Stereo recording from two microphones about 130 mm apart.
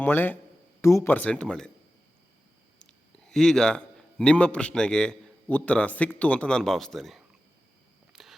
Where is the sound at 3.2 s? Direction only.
5° left (ahead or behind).